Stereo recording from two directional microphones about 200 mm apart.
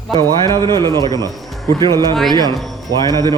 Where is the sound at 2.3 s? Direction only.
20° right (ahead or behind).